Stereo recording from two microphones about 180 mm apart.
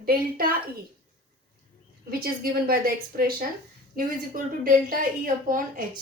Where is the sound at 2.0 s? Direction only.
55° right (ahead or behind).